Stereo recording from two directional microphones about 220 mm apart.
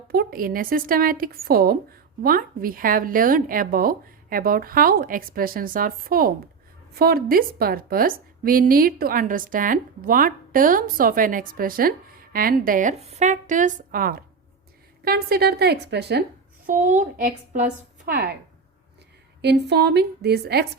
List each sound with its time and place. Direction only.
0.1 s a woman's voice: 40° right (ahead or behind)
16.6 s a woman's voice: 35° right (ahead or behind)
19.4 s a woman's voice: 50° right (ahead or behind)